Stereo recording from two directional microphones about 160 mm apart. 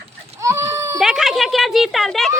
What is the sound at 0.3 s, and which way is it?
Baby cry, 20° right (ahead or behind).